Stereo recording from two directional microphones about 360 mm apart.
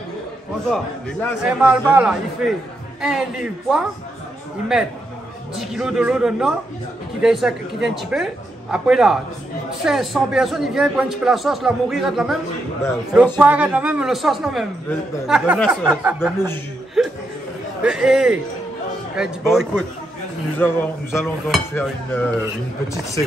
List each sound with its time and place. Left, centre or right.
1.2 s a man's voice: centre
5.6 s a man's voice: centre